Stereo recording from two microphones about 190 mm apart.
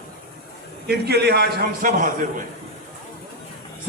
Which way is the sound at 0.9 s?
60° right (ahead or behind).